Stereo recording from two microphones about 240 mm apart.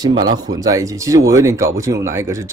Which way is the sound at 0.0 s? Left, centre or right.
Centre.